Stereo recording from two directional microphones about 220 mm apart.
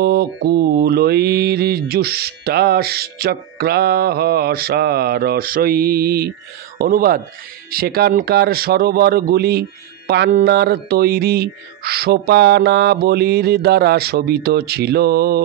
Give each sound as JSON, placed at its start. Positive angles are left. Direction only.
{"t": 0.0, "sound": "speech", "side_deg": -45}